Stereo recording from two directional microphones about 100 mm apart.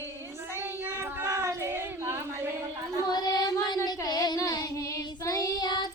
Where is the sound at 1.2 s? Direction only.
30° right (ahead or behind).